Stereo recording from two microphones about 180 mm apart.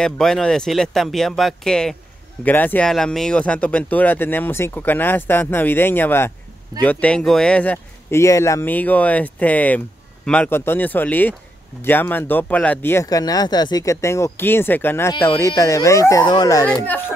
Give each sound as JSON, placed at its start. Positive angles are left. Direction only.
{"t": 0.0, "sound": "speech", "side_deg": 5}